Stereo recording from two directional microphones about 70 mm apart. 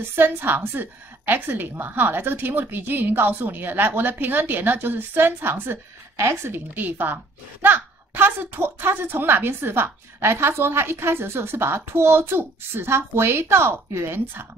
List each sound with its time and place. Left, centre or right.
0.1 s a woman's voice: right